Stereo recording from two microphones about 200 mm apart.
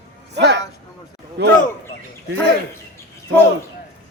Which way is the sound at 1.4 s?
55° right (ahead or behind).